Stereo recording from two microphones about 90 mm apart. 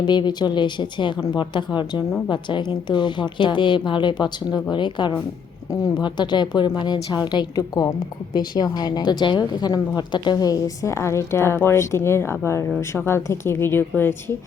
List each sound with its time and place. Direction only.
0.0 s a woman's voice: 55° left (ahead or behind); by 14.2 s 20° left (ahead or behind)